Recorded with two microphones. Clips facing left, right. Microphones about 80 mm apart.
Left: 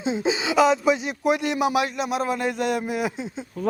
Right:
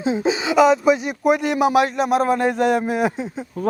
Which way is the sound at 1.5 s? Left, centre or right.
Right.